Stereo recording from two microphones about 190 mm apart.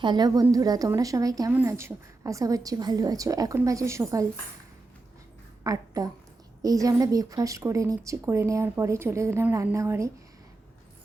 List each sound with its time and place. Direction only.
0.0 s a woman's voice: 20° right (ahead or behind)
5.6 s a woman's voice: 20° right (ahead or behind)